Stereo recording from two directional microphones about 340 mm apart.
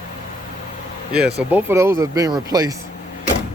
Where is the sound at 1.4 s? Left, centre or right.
Centre.